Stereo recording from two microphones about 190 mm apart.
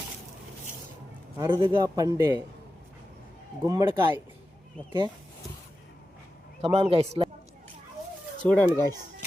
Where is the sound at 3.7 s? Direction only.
20° right (ahead or behind).